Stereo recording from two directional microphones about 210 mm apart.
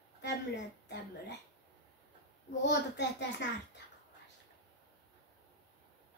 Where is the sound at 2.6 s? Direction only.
55° left (ahead or behind).